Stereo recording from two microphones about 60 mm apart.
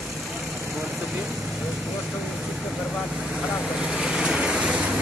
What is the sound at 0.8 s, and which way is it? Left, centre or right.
Speech, right.